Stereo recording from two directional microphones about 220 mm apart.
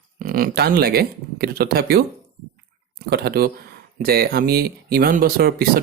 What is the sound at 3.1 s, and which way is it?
Speech, 45° right (ahead or behind).